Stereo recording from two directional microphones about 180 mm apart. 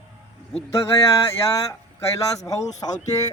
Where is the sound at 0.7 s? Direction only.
15° left (ahead or behind).